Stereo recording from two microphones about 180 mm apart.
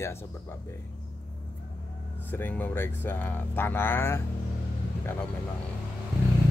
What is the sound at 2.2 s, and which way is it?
Speech, 10° left (ahead or behind).